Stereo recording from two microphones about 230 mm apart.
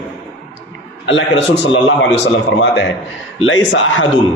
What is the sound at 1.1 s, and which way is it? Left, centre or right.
Speech, left.